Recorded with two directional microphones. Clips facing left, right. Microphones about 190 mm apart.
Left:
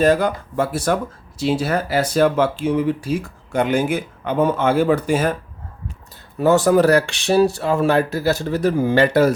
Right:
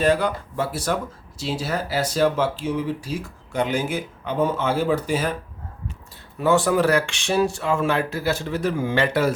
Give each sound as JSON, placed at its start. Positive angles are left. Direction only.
{"t": 0.0, "sound": "speech", "side_deg": 45}
{"t": 6.4, "sound": "speech", "side_deg": 40}